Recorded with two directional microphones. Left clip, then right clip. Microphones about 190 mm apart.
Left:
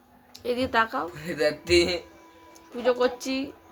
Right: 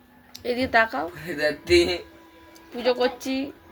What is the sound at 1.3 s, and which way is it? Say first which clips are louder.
Speech: right 2 dB; 25° left (ahead or behind).